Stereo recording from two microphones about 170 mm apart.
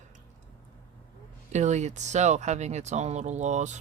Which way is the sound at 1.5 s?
45° right (ahead or behind).